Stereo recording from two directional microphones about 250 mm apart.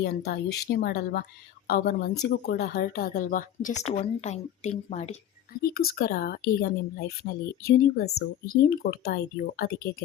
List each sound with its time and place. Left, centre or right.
0.0 s a woman's voice: left
5.7 s speech: left